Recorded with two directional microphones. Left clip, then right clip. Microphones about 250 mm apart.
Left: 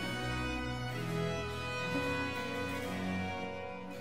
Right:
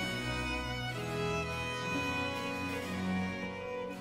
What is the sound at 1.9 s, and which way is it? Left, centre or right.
Music, right.